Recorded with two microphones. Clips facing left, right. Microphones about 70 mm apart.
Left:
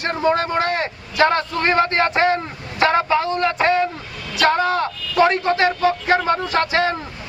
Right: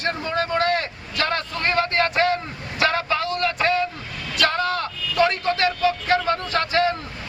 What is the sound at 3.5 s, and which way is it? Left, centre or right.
Speech, left.